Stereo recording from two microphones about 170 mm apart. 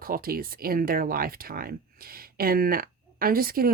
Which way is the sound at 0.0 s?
60° right (ahead or behind).